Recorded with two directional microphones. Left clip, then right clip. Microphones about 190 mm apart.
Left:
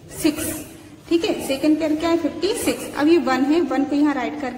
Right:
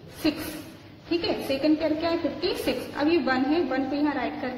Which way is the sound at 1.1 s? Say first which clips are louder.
Left 6 dB; 25° left (ahead or behind).